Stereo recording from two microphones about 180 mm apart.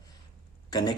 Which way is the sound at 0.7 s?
20° left (ahead or behind).